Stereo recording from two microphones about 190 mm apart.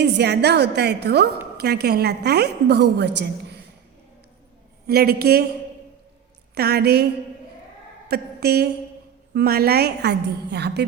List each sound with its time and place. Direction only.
0.0 s a woman's voice: 60° right (ahead or behind)
4.9 s a woman's voice: 55° right (ahead or behind)
6.5 s a woman's voice: 55° right (ahead or behind)
8.1 s a woman's voice: 55° right (ahead or behind)